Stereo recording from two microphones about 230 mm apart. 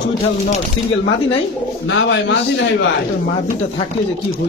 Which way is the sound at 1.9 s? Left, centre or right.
Left.